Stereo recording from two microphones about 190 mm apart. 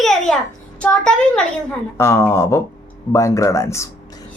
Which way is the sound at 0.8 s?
5° left (ahead or behind).